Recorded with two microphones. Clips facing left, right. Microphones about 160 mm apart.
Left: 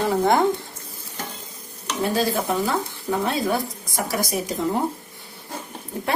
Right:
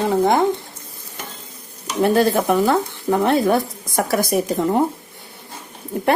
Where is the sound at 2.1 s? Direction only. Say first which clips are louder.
Right 6 dB; 60° right (ahead or behind).